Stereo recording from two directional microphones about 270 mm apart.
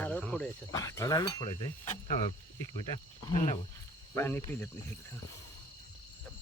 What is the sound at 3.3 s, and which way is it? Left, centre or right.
Speech, left.